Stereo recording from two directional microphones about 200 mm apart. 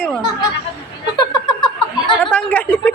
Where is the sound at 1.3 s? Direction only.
20° left (ahead or behind).